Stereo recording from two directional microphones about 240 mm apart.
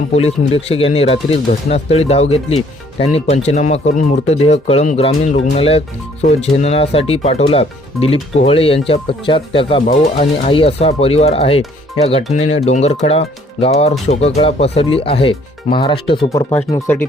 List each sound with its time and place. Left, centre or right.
0.1 s speech: left
16.5 s speech: centre